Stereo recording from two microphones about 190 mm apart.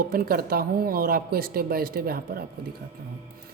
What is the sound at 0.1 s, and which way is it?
A woman's voice, 50° right (ahead or behind).